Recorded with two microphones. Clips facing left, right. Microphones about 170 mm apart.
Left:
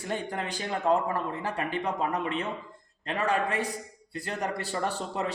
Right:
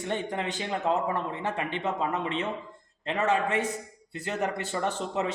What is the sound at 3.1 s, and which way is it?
Speech, 25° right (ahead or behind).